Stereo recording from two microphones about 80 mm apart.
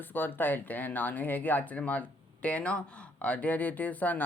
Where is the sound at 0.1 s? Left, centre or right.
Left.